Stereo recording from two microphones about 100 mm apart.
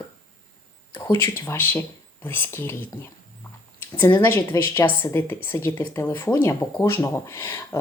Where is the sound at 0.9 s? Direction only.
45° left (ahead or behind).